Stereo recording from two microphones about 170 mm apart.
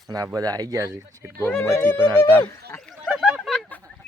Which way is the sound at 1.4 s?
15° left (ahead or behind).